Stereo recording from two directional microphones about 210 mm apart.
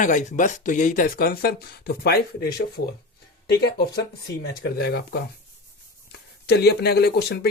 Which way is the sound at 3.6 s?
50° left (ahead or behind).